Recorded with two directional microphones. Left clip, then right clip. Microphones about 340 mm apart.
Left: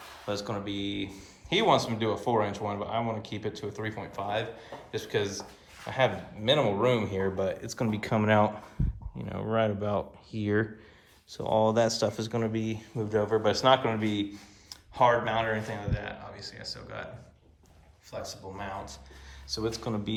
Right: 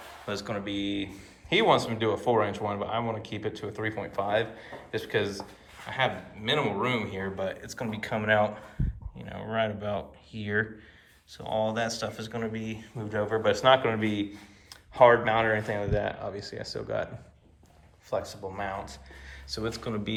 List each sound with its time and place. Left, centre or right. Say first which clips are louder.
0.3 s speech: even; centre
18.1 s speech: right 6 dB; centre